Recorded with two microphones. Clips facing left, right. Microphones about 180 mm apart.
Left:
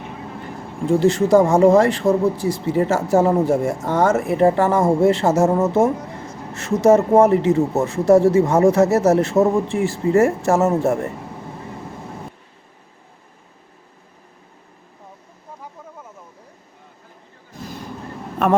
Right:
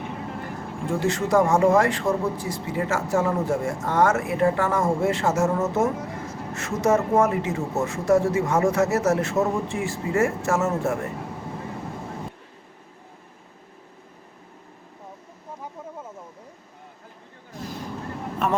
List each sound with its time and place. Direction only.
0.9 s a man's voice: 35° left (ahead or behind)